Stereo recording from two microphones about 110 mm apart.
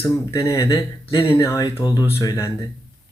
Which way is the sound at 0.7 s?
45° left (ahead or behind).